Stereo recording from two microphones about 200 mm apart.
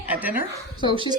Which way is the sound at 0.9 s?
25° right (ahead or behind).